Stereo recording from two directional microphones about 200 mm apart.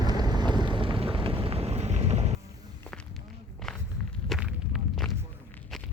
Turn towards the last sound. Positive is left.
turn(degrees=-5)  # may be behind; listen again after turning